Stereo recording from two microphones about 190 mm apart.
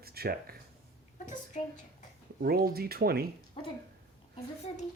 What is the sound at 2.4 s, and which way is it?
Speech, 55° right (ahead or behind).